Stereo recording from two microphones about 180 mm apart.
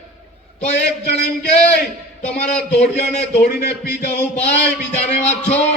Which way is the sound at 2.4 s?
40° left (ahead or behind).